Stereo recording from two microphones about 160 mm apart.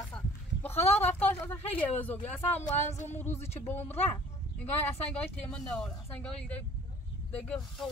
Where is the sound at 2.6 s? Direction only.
50° left (ahead or behind).